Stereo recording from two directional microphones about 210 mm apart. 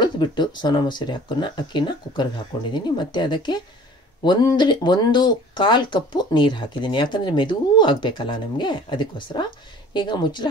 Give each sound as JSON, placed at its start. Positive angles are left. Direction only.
{"t": 0.0, "sound": "speech", "side_deg": 20}